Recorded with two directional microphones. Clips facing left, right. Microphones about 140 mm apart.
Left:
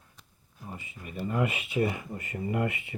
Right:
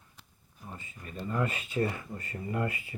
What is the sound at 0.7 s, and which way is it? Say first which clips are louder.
Speech: left 3 dB; 10° left (ahead or behind).